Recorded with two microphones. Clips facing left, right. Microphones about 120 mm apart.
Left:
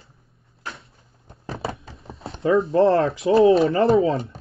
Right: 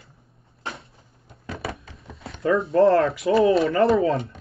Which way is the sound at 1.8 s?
30° left (ahead or behind).